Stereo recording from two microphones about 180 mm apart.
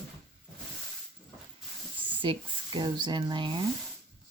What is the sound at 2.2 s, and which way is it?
Speech, 30° right (ahead or behind).